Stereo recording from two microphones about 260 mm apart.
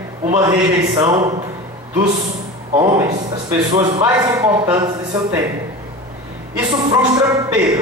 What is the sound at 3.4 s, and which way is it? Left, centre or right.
A man's voice, centre.